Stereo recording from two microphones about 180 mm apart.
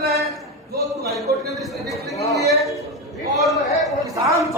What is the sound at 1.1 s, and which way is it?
A man's voice, centre (ahead or behind).